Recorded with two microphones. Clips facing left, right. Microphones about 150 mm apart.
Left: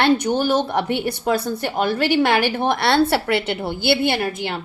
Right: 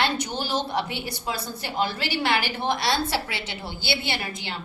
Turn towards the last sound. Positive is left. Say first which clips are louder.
# left 9 dB
turn(degrees=60)  # may be behind; listen again after turning